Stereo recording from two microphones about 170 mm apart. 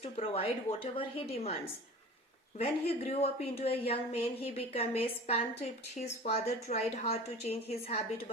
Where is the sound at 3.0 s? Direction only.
35° left (ahead or behind).